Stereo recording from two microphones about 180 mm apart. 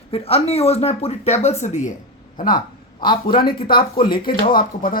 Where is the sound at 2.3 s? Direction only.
50° left (ahead or behind).